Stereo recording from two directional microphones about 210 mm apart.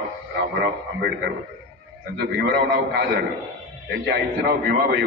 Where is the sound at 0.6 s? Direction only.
55° right (ahead or behind).